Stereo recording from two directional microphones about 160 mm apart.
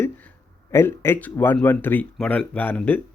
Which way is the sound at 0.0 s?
10° left (ahead or behind).